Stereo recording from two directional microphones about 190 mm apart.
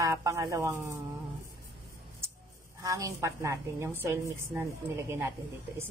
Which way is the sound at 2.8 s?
15° right (ahead or behind).